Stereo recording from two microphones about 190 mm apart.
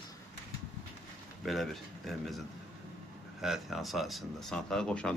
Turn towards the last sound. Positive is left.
turn(degrees=5)  # may be behind; listen again after turning